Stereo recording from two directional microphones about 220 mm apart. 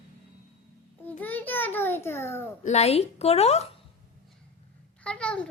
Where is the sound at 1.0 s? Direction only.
10° left (ahead or behind).